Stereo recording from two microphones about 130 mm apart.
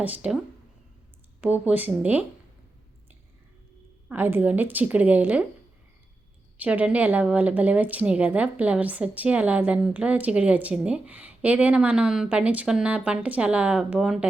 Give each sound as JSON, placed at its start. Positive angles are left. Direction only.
{"t": 0.0, "sound": "speech", "side_deg": -10}
{"t": 1.6, "sound": "speech", "side_deg": -10}
{"t": 4.1, "sound": "speech", "side_deg": -15}
{"t": 6.6, "sound": "speech", "side_deg": -10}